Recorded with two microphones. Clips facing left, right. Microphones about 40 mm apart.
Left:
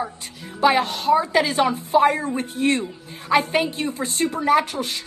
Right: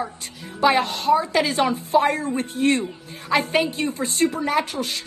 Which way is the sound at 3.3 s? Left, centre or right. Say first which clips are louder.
Left 2 dB; centre.